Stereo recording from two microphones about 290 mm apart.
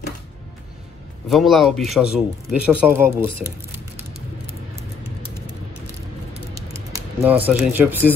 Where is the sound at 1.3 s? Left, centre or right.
Centre.